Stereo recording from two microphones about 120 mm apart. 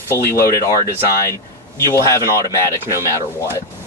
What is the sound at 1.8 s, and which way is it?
Speech, 25° left (ahead or behind).